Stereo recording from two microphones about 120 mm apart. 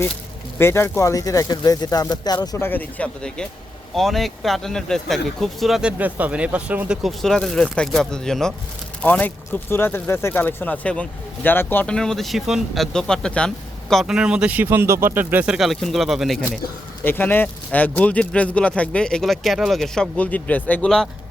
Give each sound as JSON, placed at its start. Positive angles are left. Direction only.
{"t": 0.6, "sound": "speech", "side_deg": 20}
{"t": 2.6, "sound": "speech", "side_deg": 15}
{"t": 6.0, "sound": "speech", "side_deg": -15}
{"t": 13.9, "sound": "speech", "side_deg": -5}
{"t": 15.5, "sound": "speech", "side_deg": 0}
{"t": 17.0, "sound": "speech", "side_deg": 15}